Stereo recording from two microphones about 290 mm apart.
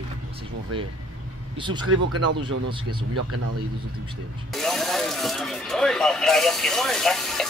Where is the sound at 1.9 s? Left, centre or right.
Right.